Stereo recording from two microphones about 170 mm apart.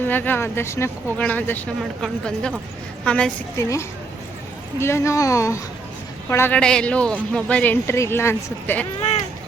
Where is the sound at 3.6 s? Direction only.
15° left (ahead or behind).